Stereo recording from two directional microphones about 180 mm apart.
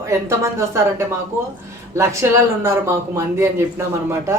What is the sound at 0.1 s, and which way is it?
Speech, 15° right (ahead or behind).